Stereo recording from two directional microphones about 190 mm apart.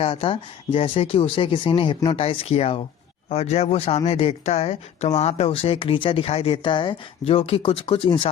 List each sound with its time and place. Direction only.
0.0 s speech: 30° left (ahead or behind)